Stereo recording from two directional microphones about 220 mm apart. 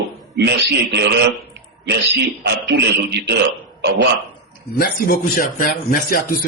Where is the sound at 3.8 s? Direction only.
50° right (ahead or behind).